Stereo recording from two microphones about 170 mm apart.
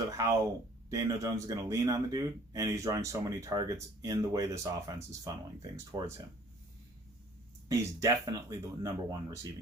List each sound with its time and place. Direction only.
0.1 s speech: 20° right (ahead or behind)
7.7 s speech: 20° right (ahead or behind)